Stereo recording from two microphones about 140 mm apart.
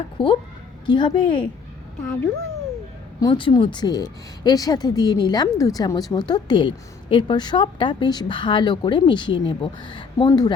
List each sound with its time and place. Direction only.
0.2 s speech: 40° left (ahead or behind)
3.2 s speech: 30° left (ahead or behind)